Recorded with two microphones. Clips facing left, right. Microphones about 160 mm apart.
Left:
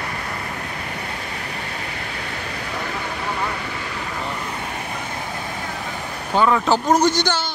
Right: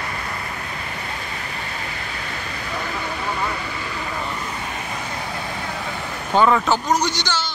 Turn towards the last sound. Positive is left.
turn(degrees=55)  # may be behind; listen again after turning